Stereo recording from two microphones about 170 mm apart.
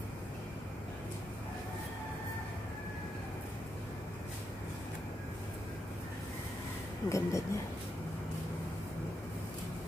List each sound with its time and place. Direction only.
7.1 s speech: 20° left (ahead or behind)